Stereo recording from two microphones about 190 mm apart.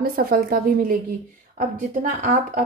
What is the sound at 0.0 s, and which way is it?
A woman's voice, 50° right (ahead or behind).